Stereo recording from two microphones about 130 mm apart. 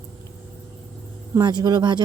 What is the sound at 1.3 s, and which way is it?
Speech, 35° right (ahead or behind).